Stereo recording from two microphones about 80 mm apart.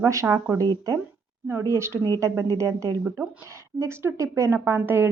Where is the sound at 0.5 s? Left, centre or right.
Right.